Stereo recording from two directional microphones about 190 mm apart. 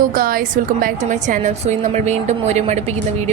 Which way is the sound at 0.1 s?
50° right (ahead or behind).